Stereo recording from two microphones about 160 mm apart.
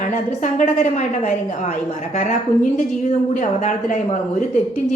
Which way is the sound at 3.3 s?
50° left (ahead or behind).